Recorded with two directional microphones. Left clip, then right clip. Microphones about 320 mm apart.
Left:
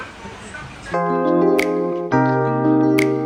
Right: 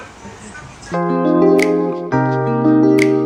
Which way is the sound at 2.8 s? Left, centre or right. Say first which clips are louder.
Right 6 dB; centre.